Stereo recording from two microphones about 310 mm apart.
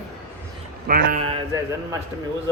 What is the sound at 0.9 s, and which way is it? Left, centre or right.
Speech, right.